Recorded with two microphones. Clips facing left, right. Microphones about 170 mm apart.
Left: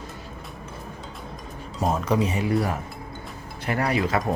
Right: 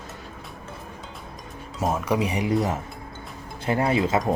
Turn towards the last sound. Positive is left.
turn(degrees=-25)  # may be behind; listen again after turning